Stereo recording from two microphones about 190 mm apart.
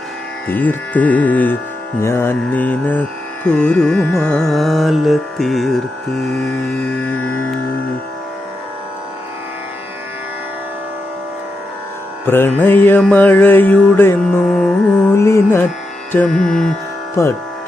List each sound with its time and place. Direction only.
0.4 s mantra: 10° left (ahead or behind)
2.0 s music: 15° left (ahead or behind)
7.2 s music: 90° left
12.2 s mantra: 10° left (ahead or behind)
16.1 s music: 5° left (ahead or behind)
17.2 s mantra: 15° left (ahead or behind)